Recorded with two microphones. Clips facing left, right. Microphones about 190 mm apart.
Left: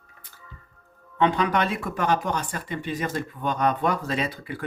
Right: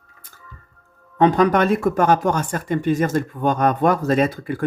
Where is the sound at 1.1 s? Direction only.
40° right (ahead or behind).